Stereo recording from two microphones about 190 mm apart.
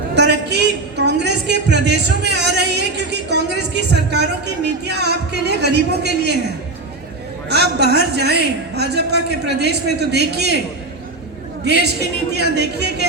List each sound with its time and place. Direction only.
0.1 s a sound: 60° right (ahead or behind)
4.9 s music: 60° right (ahead or behind)
7.5 s a man's voice: 60° right (ahead or behind)
11.6 s a woman's voice: 60° right (ahead or behind)